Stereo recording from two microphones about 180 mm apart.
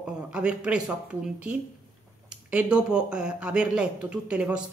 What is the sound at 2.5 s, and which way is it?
Speech, 5° right (ahead or behind).